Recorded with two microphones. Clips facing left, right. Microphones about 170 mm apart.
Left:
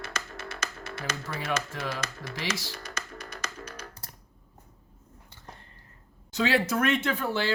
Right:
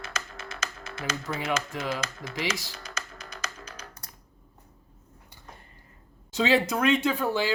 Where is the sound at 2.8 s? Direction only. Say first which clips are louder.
Left 1 dB; 60° left (ahead or behind).